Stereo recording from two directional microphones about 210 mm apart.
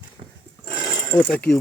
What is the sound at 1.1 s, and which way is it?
Speech, 5° left (ahead or behind).